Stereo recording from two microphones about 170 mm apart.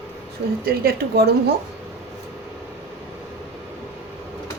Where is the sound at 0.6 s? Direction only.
65° right (ahead or behind).